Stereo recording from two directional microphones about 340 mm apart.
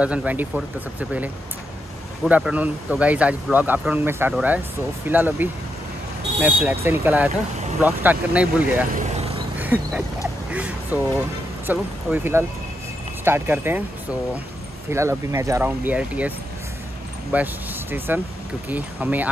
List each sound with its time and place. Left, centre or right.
0.0 s speech: centre
8.9 s vehicle: centre
9.6 s a sound: centre
11.6 s speech: centre
14.9 s speech: centre